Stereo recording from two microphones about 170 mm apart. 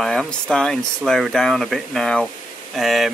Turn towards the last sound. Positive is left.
turn(degrees=0)  # may be behind; listen again after turning